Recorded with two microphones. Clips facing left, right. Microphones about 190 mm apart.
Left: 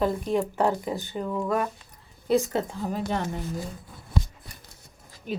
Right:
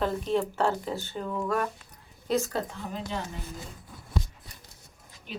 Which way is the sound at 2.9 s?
45° left (ahead or behind).